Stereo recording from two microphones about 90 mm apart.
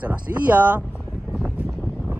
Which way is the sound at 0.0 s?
15° right (ahead or behind).